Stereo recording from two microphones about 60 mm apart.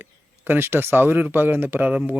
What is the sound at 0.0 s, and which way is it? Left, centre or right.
Speech, right.